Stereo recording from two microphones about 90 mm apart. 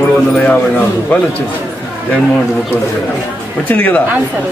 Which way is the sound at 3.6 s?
20° left (ahead or behind).